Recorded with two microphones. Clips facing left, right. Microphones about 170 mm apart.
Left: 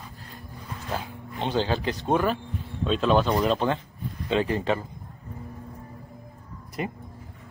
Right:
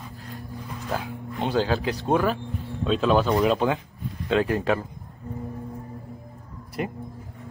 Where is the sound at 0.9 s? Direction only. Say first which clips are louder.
Right 3 dB; 5° right (ahead or behind).